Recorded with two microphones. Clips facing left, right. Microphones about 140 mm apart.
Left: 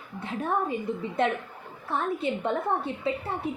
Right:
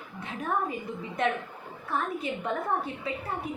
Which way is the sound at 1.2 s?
30° left (ahead or behind).